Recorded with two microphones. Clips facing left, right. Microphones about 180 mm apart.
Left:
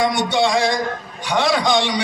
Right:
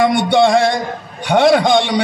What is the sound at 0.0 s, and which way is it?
A man's voice, 55° right (ahead or behind).